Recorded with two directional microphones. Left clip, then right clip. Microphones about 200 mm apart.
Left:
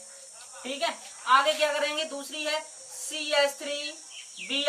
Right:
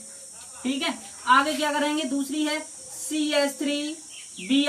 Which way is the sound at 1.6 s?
20° left (ahead or behind).